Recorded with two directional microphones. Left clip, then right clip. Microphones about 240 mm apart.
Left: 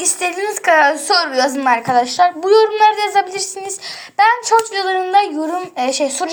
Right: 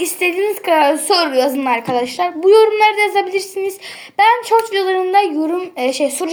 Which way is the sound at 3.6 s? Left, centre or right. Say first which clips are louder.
Right 4 dB; left.